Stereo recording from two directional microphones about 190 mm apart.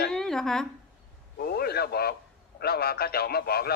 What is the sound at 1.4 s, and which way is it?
A man's voice, 55° left (ahead or behind).